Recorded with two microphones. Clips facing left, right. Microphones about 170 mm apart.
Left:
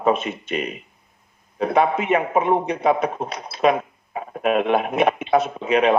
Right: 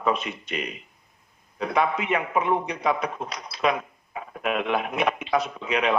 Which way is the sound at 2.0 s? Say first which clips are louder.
Left 5 dB; 50° left (ahead or behind).